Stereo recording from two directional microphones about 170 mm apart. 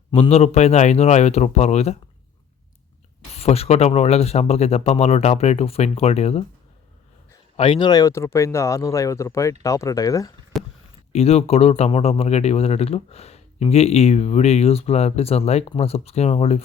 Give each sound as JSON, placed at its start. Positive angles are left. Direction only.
{"t": 0.1, "sound": "speech", "side_deg": 40}
{"t": 3.3, "sound": "speech", "side_deg": 35}
{"t": 7.5, "sound": "speech", "side_deg": 30}
{"t": 10.5, "sound": "a sound", "side_deg": 5}
{"t": 11.1, "sound": "speech", "side_deg": 35}